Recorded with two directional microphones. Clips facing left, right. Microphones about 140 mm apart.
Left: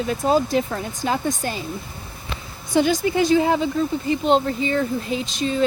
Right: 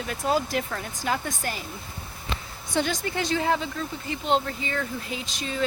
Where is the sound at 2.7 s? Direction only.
10° left (ahead or behind).